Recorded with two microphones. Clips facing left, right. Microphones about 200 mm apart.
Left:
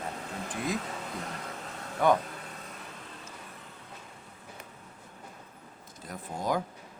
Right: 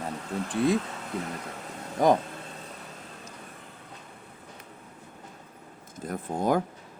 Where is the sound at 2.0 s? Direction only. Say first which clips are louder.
Right 3 dB; 35° right (ahead or behind).